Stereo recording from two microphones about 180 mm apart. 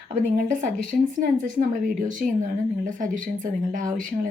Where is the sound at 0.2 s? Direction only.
50° right (ahead or behind).